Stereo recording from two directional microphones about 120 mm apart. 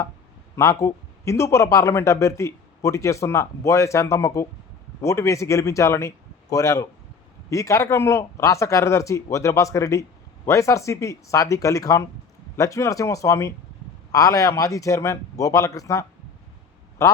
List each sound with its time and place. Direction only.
0.5 s a man's voice: 25° left (ahead or behind)